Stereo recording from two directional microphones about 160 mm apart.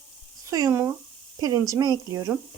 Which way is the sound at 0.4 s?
20° right (ahead or behind).